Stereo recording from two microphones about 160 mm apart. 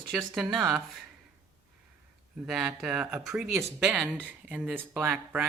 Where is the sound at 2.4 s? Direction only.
5° right (ahead or behind).